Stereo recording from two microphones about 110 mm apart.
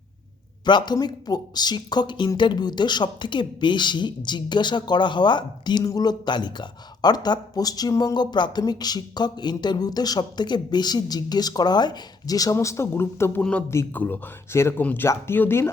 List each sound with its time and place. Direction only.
0.6 s speech: 45° left (ahead or behind); by 13.4 s 25° left (ahead or behind)
13.4 s speech: 10° left (ahead or behind)